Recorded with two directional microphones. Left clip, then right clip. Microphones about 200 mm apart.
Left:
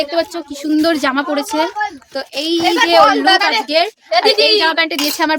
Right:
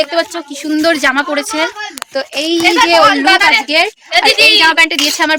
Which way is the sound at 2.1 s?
20° right (ahead or behind).